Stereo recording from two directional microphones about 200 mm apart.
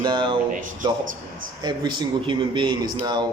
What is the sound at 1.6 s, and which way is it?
Speech, 20° right (ahead or behind).